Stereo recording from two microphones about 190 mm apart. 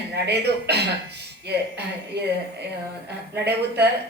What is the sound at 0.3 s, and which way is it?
Speech, 60° right (ahead or behind).